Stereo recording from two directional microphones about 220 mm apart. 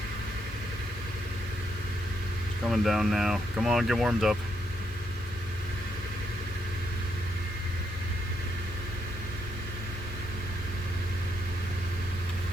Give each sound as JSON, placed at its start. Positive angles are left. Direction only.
{"t": 2.6, "sound": "speech", "side_deg": 0}